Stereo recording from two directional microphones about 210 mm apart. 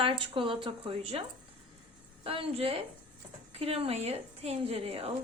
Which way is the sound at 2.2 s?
25° right (ahead or behind).